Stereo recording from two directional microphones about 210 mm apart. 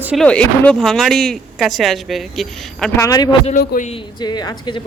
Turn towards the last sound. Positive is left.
turn(degrees=20)  # may be behind; listen again after turning